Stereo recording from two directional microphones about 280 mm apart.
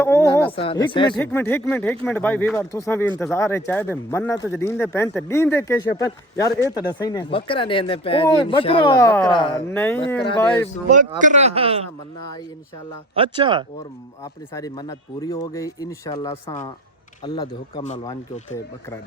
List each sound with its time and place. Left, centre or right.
0.0 s speech: centre
10.8 s speech: right
13.1 s speech: centre
14.5 s speech: centre